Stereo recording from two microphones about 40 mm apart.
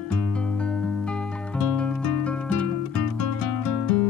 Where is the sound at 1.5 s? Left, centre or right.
Left.